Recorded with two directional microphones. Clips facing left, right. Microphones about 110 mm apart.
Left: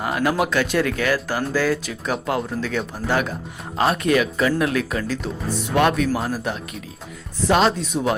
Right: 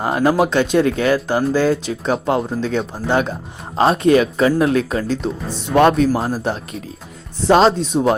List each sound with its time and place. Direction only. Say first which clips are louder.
0.0 s speech: right 5 dB; 30° right (ahead or behind)